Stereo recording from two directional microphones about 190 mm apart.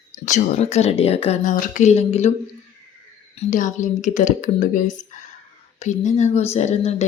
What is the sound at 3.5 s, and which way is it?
Speech, 40° left (ahead or behind).